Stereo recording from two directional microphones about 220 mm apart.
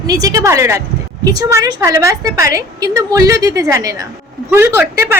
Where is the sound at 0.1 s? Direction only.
15° right (ahead or behind).